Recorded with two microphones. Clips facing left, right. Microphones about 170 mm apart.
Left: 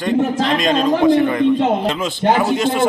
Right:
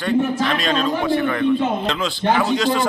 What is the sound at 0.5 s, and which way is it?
Speech, 45° left (ahead or behind).